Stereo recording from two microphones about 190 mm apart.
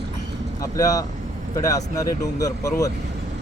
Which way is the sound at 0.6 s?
20° left (ahead or behind).